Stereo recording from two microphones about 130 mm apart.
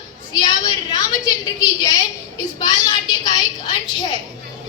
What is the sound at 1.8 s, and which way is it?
A woman's voice, 30° left (ahead or behind).